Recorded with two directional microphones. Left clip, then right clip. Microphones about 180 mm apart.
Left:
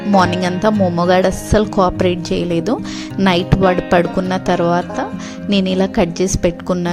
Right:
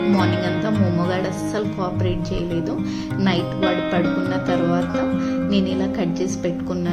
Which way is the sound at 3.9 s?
60° left (ahead or behind).